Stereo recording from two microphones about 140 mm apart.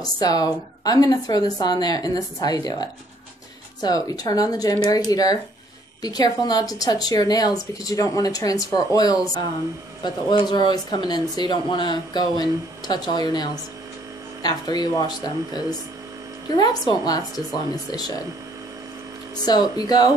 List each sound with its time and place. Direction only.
0.0 s speech: 25° left (ahead or behind)
19.4 s speech: 30° left (ahead or behind)